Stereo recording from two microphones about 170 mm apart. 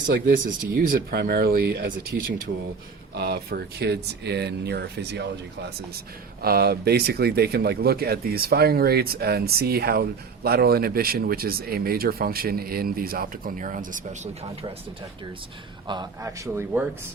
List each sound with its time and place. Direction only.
0.8 s speech: 60° right (ahead or behind); by 5.3 s 80° right
6.4 s speech: 65° right (ahead or behind); by 14.2 s 50° right (ahead or behind)
15.9 s speech: 20° right (ahead or behind)